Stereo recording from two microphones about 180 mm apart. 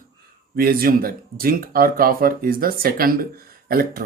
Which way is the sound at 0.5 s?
55° right (ahead or behind).